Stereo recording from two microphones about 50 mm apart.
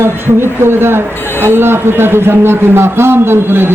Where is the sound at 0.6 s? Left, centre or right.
Right.